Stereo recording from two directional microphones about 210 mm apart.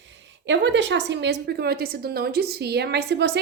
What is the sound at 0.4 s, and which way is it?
A woman's voice, 60° right (ahead or behind).